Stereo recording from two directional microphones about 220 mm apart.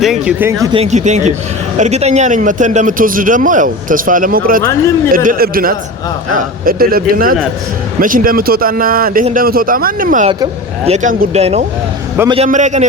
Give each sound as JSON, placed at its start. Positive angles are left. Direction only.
{"t": 0.0, "sound": "speech", "side_deg": -5}
{"t": 0.6, "sound": "a man's voice", "side_deg": -25}
{"t": 10.2, "sound": "a man's voice", "side_deg": -25}